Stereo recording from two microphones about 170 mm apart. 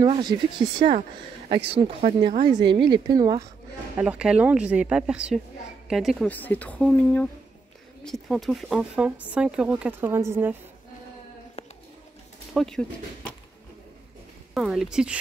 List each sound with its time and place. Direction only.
0.0 s speech: 25° right (ahead or behind)
4.0 s speech: 5° right (ahead or behind)
6.3 s speech: 10° left (ahead or behind); by 10.5 s 15° right (ahead or behind)
11.6 s a sound: 40° left (ahead or behind)
12.5 s speech: 5° left (ahead or behind)
14.5 s speech: 5° right (ahead or behind)